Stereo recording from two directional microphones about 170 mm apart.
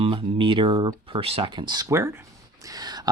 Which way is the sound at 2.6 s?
25° right (ahead or behind).